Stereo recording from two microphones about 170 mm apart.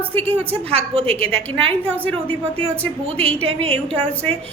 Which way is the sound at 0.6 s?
35° right (ahead or behind).